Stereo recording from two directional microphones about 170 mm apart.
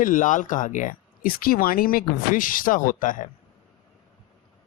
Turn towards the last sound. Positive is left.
turn(degrees=50)  # may be behind; listen again after turning